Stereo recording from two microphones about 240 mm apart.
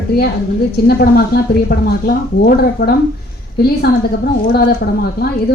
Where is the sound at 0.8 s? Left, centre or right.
Left.